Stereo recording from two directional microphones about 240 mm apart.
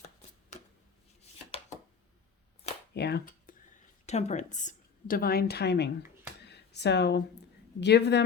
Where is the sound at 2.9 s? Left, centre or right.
Left.